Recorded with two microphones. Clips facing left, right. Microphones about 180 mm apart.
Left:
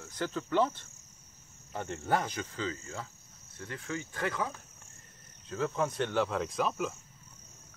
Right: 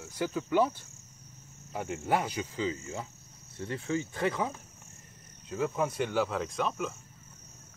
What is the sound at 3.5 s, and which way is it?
Cricket, 25° right (ahead or behind).